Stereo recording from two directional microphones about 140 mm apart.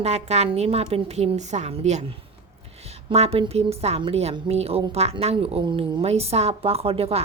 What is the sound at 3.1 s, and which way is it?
Speech, 45° right (ahead or behind).